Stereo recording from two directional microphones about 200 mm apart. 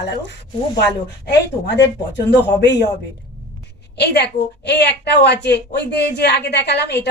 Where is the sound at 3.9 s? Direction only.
55° left (ahead or behind).